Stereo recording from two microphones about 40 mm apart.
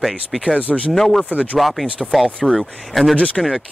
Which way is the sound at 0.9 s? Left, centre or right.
Centre.